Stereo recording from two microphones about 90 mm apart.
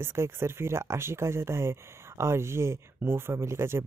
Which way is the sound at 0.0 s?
30° right (ahead or behind).